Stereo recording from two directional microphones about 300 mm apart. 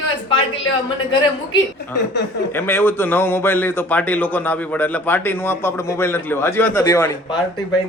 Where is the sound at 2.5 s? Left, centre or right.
Centre.